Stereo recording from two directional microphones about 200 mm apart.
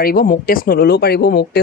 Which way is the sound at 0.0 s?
45° left (ahead or behind).